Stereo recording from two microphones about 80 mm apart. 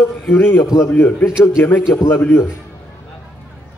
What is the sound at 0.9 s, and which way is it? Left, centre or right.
A man's voice, left.